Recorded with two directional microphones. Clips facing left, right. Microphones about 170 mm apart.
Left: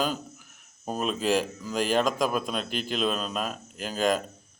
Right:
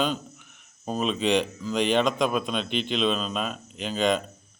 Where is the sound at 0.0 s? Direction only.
5° left (ahead or behind).